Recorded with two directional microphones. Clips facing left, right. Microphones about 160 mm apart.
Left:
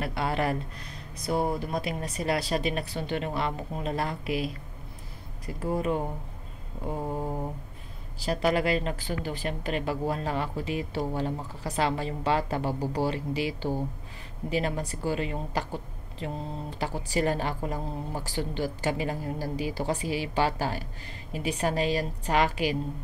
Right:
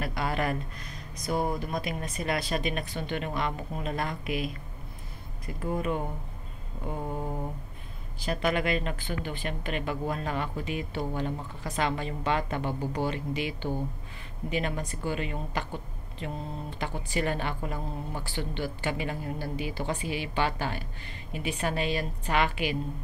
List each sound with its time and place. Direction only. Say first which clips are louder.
0.0 s speech: left 2 dB; 25° left (ahead or behind)
5.6 s speech: left 2 dB; 35° left (ahead or behind)